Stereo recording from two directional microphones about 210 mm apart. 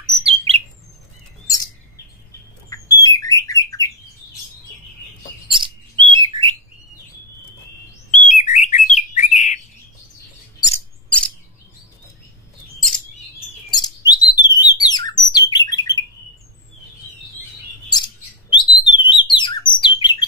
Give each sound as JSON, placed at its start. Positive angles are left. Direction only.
{"t": 0.2, "sound": "bird", "side_deg": -30}
{"t": 2.7, "sound": "bird", "side_deg": 15}
{"t": 5.5, "sound": "bird", "side_deg": -25}
{"t": 8.1, "sound": "bird", "side_deg": 35}
{"t": 11.1, "sound": "chirp", "side_deg": 5}
{"t": 13.7, "sound": "bird", "side_deg": 20}
{"t": 17.9, "sound": "bird", "side_deg": 20}